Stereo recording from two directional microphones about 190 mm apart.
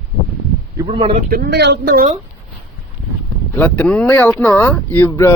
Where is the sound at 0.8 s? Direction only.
30° right (ahead or behind).